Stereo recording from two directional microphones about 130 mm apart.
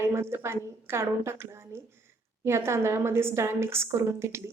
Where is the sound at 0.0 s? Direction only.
20° right (ahead or behind).